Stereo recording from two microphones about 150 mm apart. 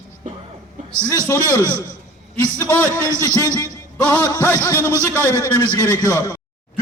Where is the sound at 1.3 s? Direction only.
20° left (ahead or behind).